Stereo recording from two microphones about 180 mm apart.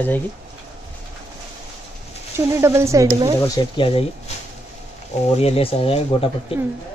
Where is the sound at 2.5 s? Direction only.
15° right (ahead or behind).